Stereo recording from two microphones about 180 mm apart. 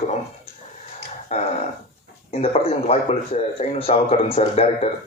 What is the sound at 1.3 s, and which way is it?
Speech, 35° left (ahead or behind).